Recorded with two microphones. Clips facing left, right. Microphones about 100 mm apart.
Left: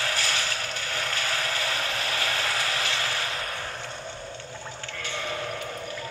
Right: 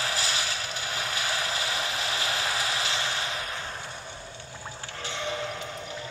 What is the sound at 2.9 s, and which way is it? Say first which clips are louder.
Mechanisms: left 1 dB; 20° right (ahead or behind).